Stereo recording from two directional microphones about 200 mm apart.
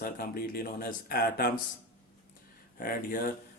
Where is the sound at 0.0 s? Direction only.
50° left (ahead or behind).